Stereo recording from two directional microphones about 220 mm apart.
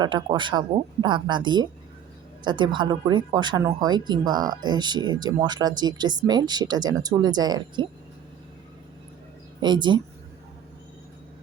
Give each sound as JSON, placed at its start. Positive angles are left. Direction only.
{"t": 0.0, "sound": "speech", "side_deg": -20}
{"t": 9.6, "sound": "speech", "side_deg": -20}